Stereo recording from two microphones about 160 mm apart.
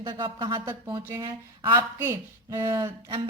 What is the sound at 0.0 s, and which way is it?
A woman's voice, 30° right (ahead or behind).